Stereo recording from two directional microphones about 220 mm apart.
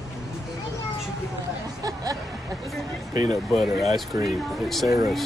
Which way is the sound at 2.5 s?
Centre (ahead or behind).